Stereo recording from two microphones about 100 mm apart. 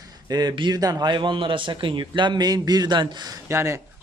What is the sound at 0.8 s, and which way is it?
Speech, 40° right (ahead or behind).